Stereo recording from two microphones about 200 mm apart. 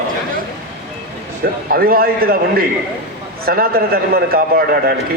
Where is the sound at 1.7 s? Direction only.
50° right (ahead or behind).